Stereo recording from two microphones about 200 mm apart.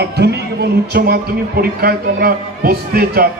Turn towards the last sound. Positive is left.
turn(degrees=-50)  # may be behind; listen again after turning